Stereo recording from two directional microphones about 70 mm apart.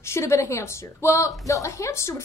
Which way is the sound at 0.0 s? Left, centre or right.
Left.